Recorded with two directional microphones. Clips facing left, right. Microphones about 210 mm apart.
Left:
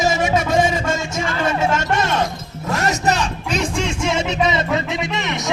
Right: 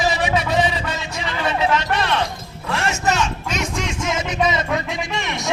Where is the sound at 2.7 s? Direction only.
40° left (ahead or behind).